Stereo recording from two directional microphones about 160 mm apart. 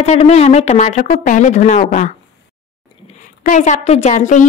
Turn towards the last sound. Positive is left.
turn(degrees=50)  # may be behind; listen again after turning